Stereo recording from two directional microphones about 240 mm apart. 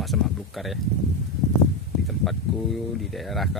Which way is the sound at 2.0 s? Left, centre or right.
Centre.